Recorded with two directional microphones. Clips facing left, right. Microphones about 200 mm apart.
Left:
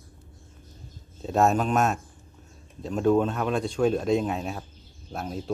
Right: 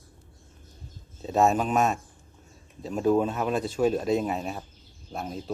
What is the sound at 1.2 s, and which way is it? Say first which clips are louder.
Speech: even; centre (ahead or behind).